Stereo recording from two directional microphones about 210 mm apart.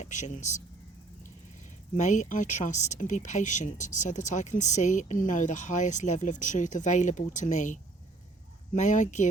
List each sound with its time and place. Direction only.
0.0 s speech: 35° left (ahead or behind)
2.0 s speech: 35° left (ahead or behind)